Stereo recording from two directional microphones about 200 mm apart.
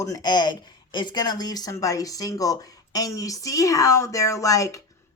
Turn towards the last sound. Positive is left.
turn(degrees=15)  # may be behind; listen again after turning